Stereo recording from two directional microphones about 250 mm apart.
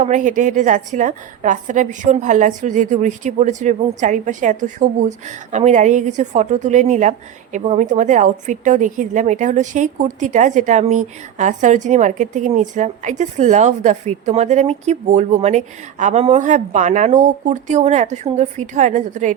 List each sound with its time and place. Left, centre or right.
0.0 s a woman's voice: right